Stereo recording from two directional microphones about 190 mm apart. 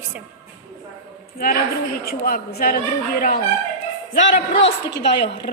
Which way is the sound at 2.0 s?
50° left (ahead or behind).